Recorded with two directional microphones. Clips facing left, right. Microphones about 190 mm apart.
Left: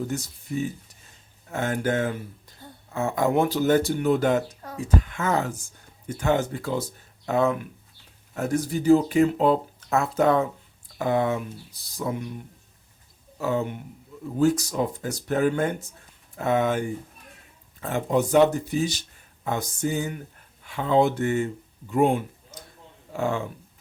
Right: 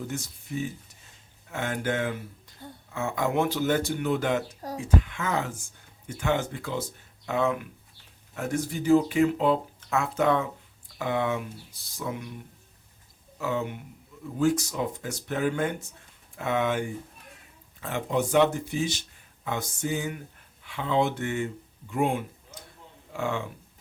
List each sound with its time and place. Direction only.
1.5 s speech: 40° left (ahead or behind)
13.4 s speech: 40° left (ahead or behind)